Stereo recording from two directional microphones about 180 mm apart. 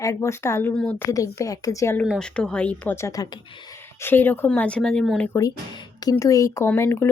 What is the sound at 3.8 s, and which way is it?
Speech, 10° left (ahead or behind).